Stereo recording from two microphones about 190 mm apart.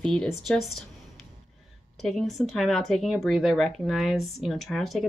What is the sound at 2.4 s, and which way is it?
Speech, centre (ahead or behind).